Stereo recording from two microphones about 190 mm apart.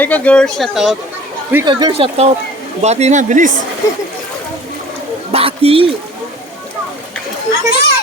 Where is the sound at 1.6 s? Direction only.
20° right (ahead or behind); by 3.5 s 40° right (ahead or behind).